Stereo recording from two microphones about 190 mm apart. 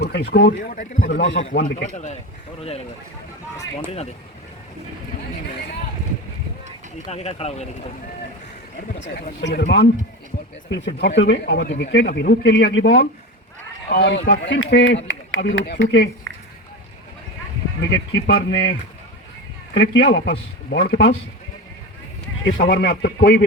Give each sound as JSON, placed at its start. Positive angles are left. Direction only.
{"t": 0.0, "sound": "speech", "side_deg": 60}
{"t": 1.2, "sound": "a man's voice", "side_deg": 75}
{"t": 2.6, "sound": "speech", "side_deg": 30}
{"t": 7.1, "sound": "speech", "side_deg": 35}
{"t": 9.0, "sound": "a man's voice", "side_deg": 70}
{"t": 17.8, "sound": "speech", "side_deg": 65}
{"t": 19.7, "sound": "speech", "side_deg": 60}
{"t": 22.5, "sound": "speech", "side_deg": 50}